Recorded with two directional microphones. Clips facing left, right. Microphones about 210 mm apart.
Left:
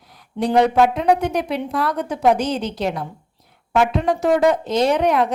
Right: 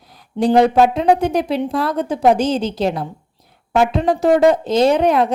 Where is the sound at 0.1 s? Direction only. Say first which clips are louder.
Right 4 dB; 30° right (ahead or behind).